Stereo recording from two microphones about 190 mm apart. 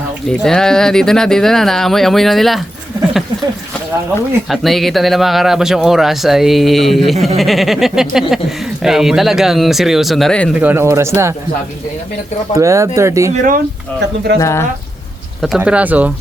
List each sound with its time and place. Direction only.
0.3 s speech: 5° left (ahead or behind)
4.4 s speech: centre (ahead or behind)
10.5 s speech: 10° right (ahead or behind)
12.5 s speech: 15° right (ahead or behind)
14.3 s speech: 15° left (ahead or behind)
15.4 s speech: 5° right (ahead or behind)